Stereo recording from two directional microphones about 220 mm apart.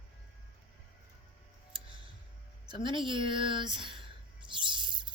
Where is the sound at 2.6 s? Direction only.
20° right (ahead or behind).